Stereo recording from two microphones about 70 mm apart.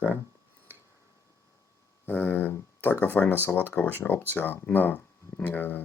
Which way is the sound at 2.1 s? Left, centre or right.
Left.